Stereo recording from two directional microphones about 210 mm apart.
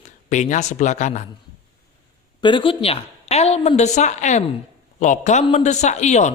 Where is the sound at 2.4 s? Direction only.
25° left (ahead or behind).